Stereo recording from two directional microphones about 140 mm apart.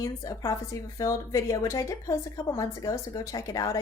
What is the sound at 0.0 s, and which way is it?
A woman's voice, 25° left (ahead or behind).